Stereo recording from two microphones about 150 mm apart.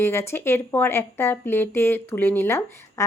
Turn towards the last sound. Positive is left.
turn(degrees=15)  # may be behind; listen again after turning